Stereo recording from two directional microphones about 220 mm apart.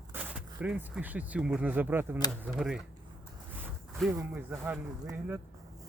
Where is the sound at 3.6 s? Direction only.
10° right (ahead or behind).